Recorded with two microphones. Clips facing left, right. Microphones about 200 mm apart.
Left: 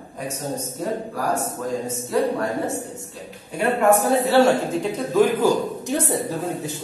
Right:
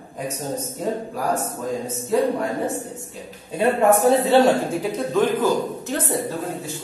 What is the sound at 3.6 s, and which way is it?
A man's voice, 20° right (ahead or behind).